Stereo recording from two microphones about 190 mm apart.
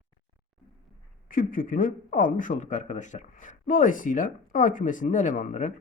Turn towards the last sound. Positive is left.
turn(degrees=40)  # may be behind; listen again after turning